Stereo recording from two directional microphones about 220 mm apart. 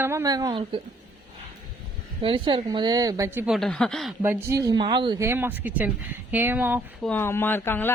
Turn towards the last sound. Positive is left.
turn(degrees=10)  # may be behind; listen again after turning